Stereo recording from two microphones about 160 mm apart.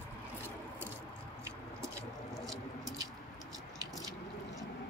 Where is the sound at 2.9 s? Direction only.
20° right (ahead or behind).